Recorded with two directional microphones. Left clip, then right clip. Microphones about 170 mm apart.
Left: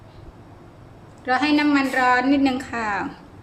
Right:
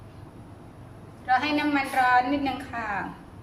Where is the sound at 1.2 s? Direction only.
60° left (ahead or behind).